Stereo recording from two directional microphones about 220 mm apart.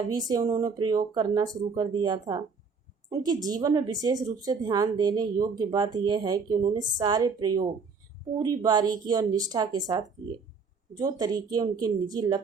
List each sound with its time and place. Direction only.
0.1 s speech: 20° right (ahead or behind)